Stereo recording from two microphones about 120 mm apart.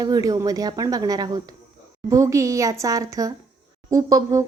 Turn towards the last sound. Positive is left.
turn(degrees=-30)  # may be behind; listen again after turning